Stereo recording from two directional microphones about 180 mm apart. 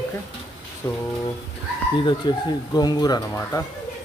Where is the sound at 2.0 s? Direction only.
25° left (ahead or behind).